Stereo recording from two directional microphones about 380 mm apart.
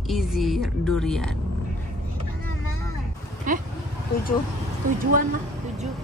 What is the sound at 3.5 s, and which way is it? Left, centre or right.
Speech, right.